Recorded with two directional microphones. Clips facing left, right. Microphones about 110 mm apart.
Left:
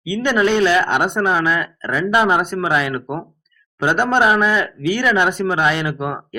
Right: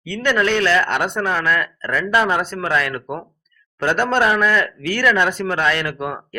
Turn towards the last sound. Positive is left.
turn(degrees=15)  # may be behind; listen again after turning